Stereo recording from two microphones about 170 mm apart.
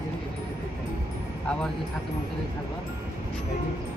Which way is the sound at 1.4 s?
5° left (ahead or behind).